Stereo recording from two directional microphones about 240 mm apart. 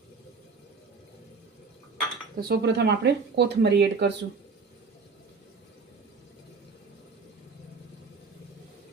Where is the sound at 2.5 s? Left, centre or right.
Right.